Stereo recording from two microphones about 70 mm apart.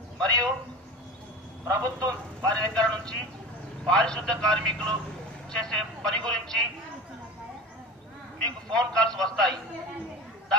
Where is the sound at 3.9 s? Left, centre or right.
Centre.